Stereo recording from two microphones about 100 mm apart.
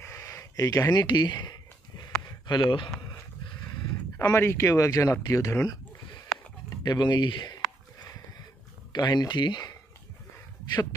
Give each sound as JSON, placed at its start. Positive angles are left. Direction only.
{"t": 0.0, "sound": "a sound", "side_deg": 30}
{"t": 1.0, "sound": "a sound", "side_deg": 45}
{"t": 2.4, "sound": "speech", "side_deg": 50}
{"t": 4.2, "sound": "speech", "side_deg": 25}
{"t": 6.8, "sound": "speech", "side_deg": 45}
{"t": 8.9, "sound": "speech", "side_deg": 45}